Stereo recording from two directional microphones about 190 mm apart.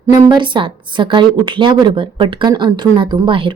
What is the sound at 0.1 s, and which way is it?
A woman's voice, 25° right (ahead or behind).